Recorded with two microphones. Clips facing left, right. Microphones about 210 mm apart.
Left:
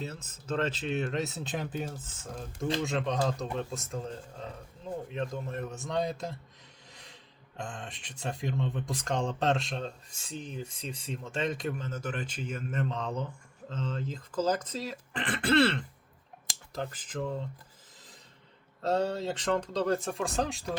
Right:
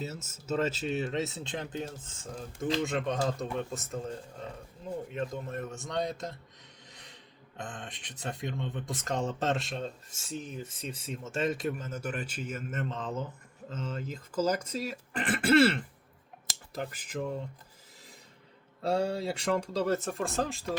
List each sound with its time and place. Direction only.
0.0 s speech: 5° right (ahead or behind)
2.8 s speech: centre (ahead or behind)
6.9 s a sound: centre (ahead or behind)
8.2 s speech: centre (ahead or behind)
18.8 s speech: 10° right (ahead or behind)